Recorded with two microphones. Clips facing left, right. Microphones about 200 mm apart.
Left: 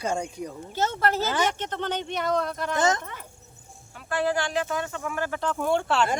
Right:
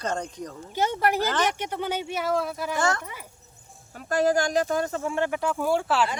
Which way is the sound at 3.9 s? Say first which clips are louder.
Right 4 dB; 40° right (ahead or behind).